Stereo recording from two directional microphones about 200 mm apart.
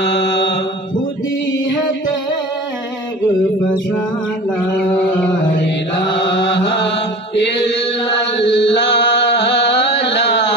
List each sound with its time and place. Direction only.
0.0 s mantra: 60° left (ahead or behind)
6.1 s chant: 60° left (ahead or behind)
7.3 s mantra: 60° left (ahead or behind)
8.4 s chant: 60° left (ahead or behind)